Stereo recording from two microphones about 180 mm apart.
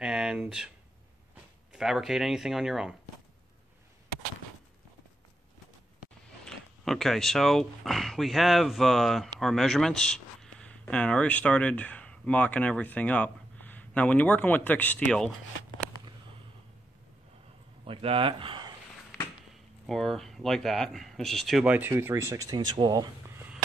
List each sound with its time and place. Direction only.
0.0 s a sound: 5° right (ahead or behind)
1.7 s speech: centre (ahead or behind)
6.4 s speech: centre (ahead or behind)
17.8 s speech: 30° right (ahead or behind)
19.9 s speech: centre (ahead or behind); by 23.0 s 20° right (ahead or behind)